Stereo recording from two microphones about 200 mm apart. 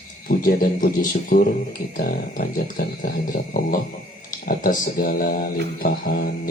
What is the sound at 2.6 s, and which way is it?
Speech, 45° left (ahead or behind).